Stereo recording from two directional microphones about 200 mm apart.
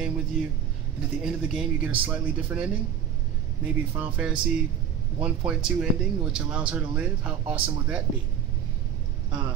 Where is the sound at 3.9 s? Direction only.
10° right (ahead or behind).